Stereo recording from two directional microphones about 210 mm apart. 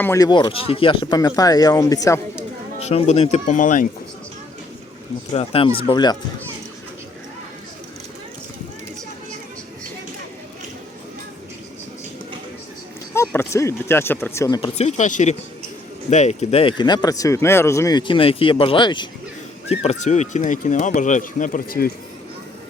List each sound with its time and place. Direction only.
0.0 s speech: 15° left (ahead or behind)
2.8 s speech: 30° left (ahead or behind)
5.3 s speech: 30° left (ahead or behind)
13.1 s speech: 10° left (ahead or behind)
14.8 s speech: 35° left (ahead or behind)